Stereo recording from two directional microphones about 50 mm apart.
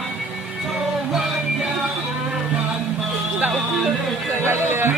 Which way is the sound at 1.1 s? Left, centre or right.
Centre.